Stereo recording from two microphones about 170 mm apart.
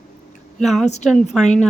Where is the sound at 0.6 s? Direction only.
Centre (ahead or behind).